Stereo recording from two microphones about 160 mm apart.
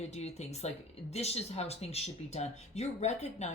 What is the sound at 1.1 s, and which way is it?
Speech, 40° left (ahead or behind).